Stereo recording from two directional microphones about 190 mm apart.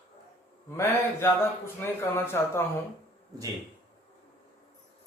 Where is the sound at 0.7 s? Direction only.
15° left (ahead or behind).